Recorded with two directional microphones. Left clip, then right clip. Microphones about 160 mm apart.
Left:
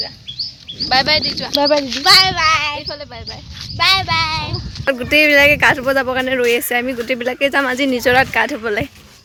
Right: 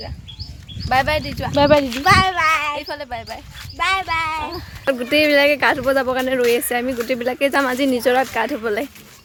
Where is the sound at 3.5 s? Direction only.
Centre (ahead or behind).